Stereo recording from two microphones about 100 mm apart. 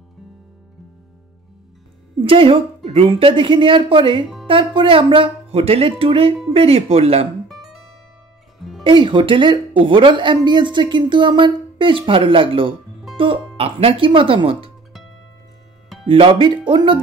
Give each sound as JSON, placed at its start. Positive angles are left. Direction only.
{"t": 2.2, "sound": "speech", "side_deg": -60}
{"t": 7.4, "sound": "music", "side_deg": -5}
{"t": 8.8, "sound": "speech", "side_deg": -55}
{"t": 16.1, "sound": "speech", "side_deg": -60}